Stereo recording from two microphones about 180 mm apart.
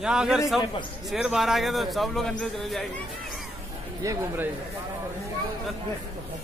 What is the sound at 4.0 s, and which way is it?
Speech, 20° right (ahead or behind).